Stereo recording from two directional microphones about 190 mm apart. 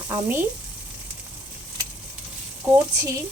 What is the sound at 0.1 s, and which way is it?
Speech, 10° right (ahead or behind).